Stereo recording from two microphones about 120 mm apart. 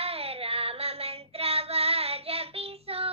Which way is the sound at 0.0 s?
55° right (ahead or behind).